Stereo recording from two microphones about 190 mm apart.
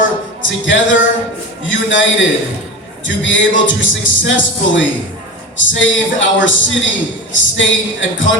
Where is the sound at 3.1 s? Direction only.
80° left.